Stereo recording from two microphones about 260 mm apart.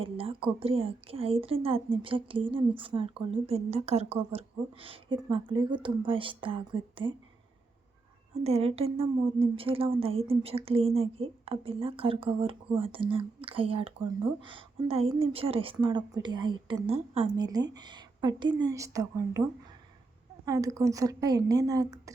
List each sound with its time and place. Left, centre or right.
0.0 s a sound: right
0.6 s a woman's voice: right
8.4 s a woman's voice: right